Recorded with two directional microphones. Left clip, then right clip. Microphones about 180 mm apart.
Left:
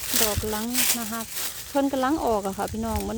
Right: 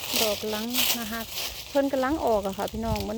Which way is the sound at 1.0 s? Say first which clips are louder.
Even; 20° left (ahead or behind).